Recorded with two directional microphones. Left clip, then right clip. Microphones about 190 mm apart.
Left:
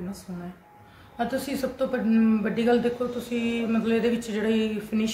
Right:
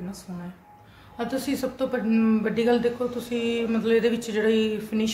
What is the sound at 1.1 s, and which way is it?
Speech, 35° right (ahead or behind).